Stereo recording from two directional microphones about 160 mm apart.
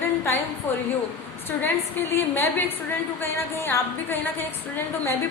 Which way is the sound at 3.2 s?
15° left (ahead or behind).